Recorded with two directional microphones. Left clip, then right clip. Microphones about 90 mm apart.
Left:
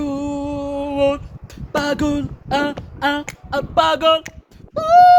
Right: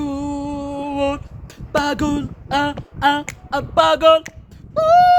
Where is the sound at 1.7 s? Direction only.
30° right (ahead or behind).